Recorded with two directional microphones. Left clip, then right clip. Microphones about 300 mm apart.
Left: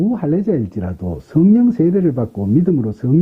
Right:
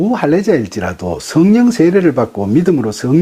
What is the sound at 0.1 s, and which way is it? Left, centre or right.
Speech, centre.